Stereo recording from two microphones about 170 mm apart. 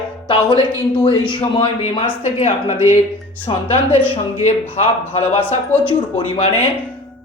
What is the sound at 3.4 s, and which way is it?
Speech, 30° left (ahead or behind).